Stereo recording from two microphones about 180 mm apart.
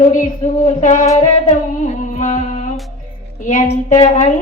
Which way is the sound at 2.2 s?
45° left (ahead or behind).